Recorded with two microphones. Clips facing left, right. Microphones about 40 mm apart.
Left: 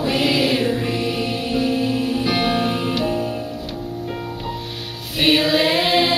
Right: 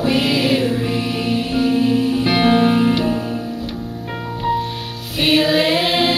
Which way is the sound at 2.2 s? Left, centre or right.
Right.